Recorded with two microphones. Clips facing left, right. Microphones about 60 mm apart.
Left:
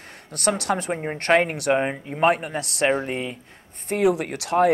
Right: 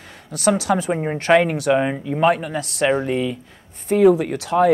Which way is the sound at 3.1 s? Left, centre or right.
Left.